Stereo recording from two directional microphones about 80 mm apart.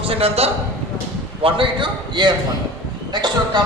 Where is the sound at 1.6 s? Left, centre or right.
Right.